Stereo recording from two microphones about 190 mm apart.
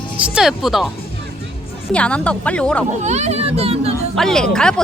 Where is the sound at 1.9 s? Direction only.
5° left (ahead or behind).